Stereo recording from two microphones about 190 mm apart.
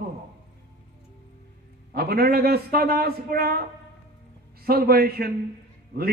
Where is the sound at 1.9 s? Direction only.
55° right (ahead or behind).